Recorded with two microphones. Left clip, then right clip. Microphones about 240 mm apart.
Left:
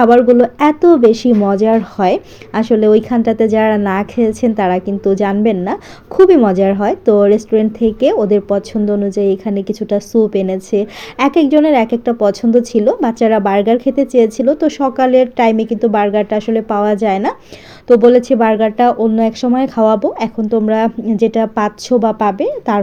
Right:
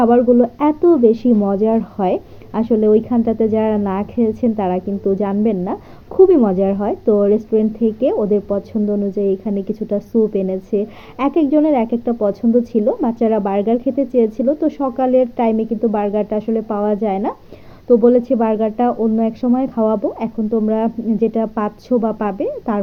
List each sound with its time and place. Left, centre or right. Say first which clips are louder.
0.0 s speech: left 4 dB; left